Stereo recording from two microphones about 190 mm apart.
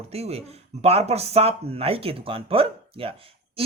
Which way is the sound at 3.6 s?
30° right (ahead or behind).